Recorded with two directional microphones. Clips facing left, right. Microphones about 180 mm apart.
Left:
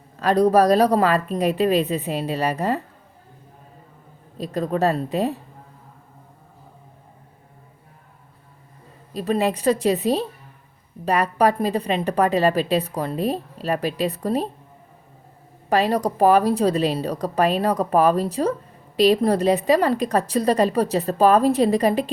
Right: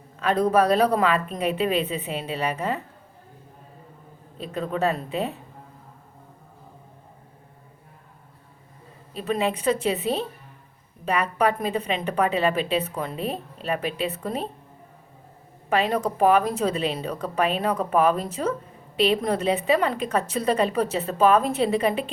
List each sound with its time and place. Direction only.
0.2 s a woman's voice: 35° left (ahead or behind)
4.4 s a woman's voice: 40° left (ahead or behind)
9.1 s a woman's voice: 40° left (ahead or behind)
15.7 s a woman's voice: 35° left (ahead or behind)